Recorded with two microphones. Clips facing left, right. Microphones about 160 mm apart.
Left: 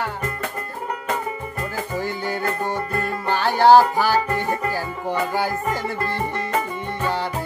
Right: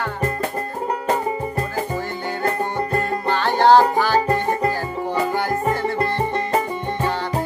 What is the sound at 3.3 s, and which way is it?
Music, 10° left (ahead or behind).